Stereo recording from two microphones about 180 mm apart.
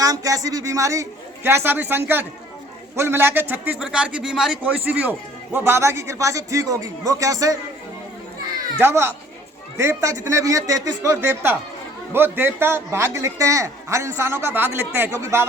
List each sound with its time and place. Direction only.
0.0 s a man's voice: 20° right (ahead or behind)
8.8 s a man's voice: 15° right (ahead or behind)